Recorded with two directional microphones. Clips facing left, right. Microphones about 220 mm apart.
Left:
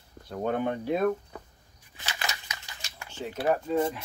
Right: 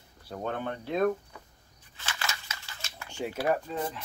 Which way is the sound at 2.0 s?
15° left (ahead or behind).